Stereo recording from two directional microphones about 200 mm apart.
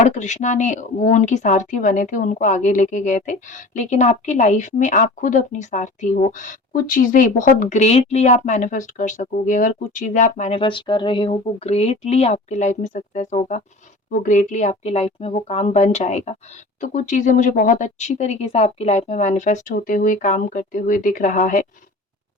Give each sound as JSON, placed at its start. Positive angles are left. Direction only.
{"t": 0.0, "sound": "a woman's voice", "side_deg": 35}